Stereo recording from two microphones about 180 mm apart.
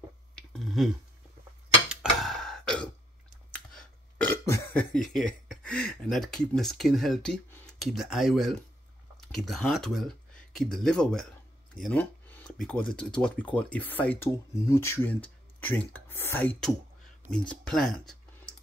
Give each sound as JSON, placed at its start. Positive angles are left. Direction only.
{"t": 0.4, "sound": "a sound", "side_deg": 0}
{"t": 3.5, "sound": "burping", "side_deg": 5}
{"t": 7.8, "sound": "speech", "side_deg": 0}